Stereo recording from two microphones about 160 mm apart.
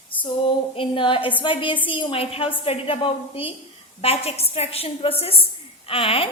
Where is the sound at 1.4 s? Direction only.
30° left (ahead or behind).